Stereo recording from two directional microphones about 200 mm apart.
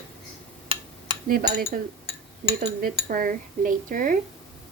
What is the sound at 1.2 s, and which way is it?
Speech, 45° right (ahead or behind).